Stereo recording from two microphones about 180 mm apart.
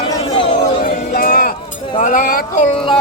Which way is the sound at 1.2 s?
50° left (ahead or behind).